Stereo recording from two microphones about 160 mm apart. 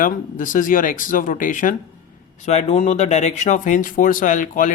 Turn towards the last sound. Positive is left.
turn(degrees=55)  # may be behind; listen again after turning